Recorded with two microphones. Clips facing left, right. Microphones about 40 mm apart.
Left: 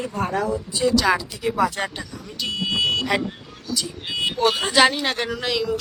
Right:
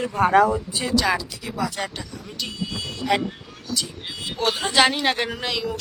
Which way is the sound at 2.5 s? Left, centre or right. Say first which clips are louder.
Left 13 dB; left.